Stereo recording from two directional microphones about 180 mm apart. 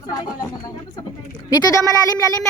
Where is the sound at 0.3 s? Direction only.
20° left (ahead or behind).